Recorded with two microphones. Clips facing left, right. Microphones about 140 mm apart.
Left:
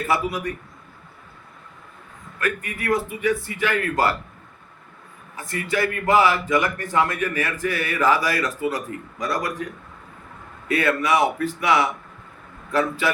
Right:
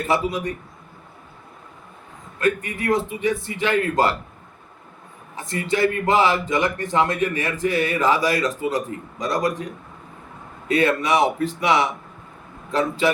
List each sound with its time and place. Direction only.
0.1 s speech: 20° right (ahead or behind)
2.4 s speech: 25° right (ahead or behind)
5.4 s speech: 25° right (ahead or behind)
13.0 s speech: 20° right (ahead or behind)